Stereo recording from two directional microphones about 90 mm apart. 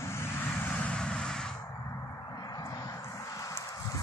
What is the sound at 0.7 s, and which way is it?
Vehicle, 15° left (ahead or behind).